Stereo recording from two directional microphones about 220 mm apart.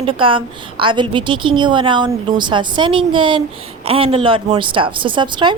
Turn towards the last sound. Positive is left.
turn(degrees=-20)  # may be behind; listen again after turning